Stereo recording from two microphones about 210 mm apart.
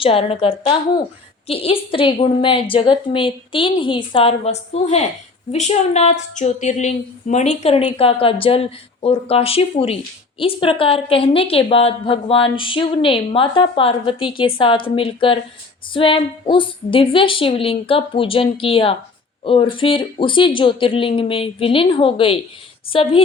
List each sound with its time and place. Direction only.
0.0 s speech: 25° left (ahead or behind)